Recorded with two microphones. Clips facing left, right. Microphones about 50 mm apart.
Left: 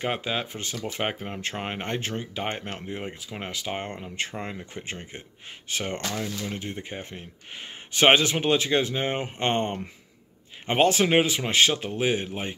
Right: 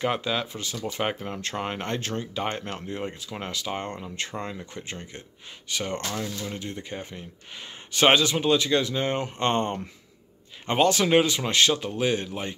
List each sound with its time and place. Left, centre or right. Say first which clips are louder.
0.0 s speech: right 2 dB; left
0.5 s speech: right 1 dB; left
0.9 s speech: right 2 dB; centre
6.1 s speech: left 1 dB; centre